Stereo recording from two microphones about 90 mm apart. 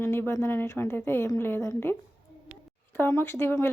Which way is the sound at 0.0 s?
25° left (ahead or behind).